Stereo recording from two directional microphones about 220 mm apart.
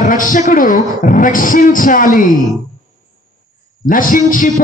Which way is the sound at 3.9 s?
40° left (ahead or behind).